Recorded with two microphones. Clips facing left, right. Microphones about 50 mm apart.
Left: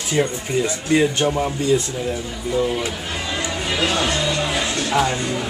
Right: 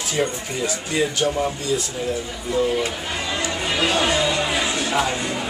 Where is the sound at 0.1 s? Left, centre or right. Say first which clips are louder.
Left 4 dB; left.